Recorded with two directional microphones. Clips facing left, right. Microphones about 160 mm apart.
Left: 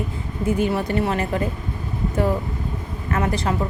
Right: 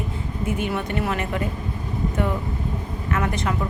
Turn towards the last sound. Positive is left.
turn(degrees=30)  # may be behind; listen again after turning